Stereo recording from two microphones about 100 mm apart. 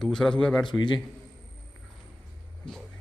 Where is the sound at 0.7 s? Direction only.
50° left (ahead or behind).